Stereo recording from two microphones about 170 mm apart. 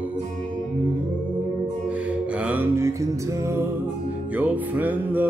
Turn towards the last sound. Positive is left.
turn(degrees=-10)  # may be behind; listen again after turning